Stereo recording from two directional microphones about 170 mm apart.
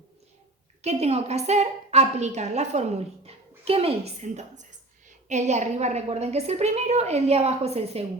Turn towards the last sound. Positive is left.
turn(degrees=-35)  # may be behind; listen again after turning